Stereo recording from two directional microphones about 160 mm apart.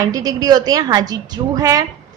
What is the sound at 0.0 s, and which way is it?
A woman's voice, 20° right (ahead or behind).